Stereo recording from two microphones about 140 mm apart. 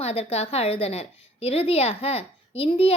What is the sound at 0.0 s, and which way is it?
Speech, 45° left (ahead or behind).